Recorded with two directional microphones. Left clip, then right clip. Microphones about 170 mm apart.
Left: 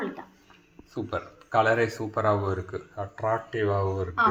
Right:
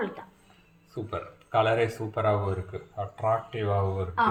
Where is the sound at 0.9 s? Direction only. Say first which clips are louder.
Left 3 dB; 30° left (ahead or behind).